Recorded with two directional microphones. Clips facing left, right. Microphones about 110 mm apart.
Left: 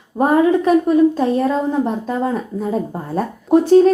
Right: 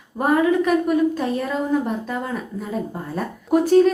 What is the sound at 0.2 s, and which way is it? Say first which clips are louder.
A child's voice: left 4 dB; 30° left (ahead or behind).